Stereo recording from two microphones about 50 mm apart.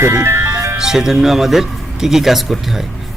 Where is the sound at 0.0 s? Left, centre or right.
Right.